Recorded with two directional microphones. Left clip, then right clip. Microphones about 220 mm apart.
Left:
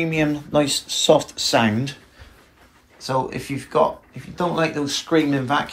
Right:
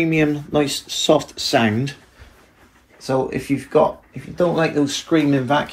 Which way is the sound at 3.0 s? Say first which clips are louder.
Right 3 dB; 10° left (ahead or behind).